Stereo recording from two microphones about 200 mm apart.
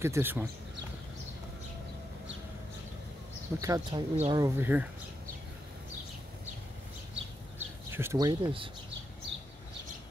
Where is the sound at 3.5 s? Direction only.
15° right (ahead or behind).